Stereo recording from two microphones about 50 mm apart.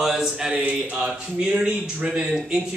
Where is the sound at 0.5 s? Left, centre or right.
Right.